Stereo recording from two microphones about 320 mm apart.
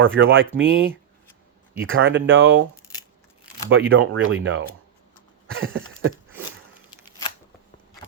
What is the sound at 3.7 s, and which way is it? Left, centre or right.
Speech, right.